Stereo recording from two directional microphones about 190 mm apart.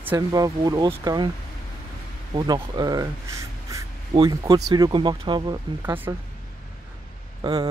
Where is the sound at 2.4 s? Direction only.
20° right (ahead or behind).